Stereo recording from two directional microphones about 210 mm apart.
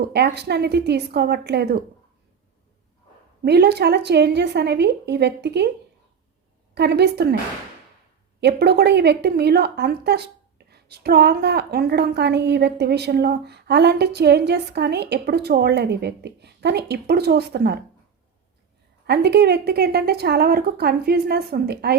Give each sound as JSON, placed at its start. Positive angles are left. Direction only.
{"t": 0.0, "sound": "a woman's voice", "side_deg": -50}
{"t": 3.4, "sound": "a woman's voice", "side_deg": -50}
{"t": 6.7, "sound": "a woman's voice", "side_deg": -50}
{"t": 8.4, "sound": "a woman's voice", "side_deg": -50}
{"t": 19.0, "sound": "a woman's voice", "side_deg": -50}